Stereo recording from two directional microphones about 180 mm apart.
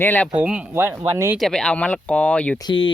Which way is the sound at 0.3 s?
5° right (ahead or behind).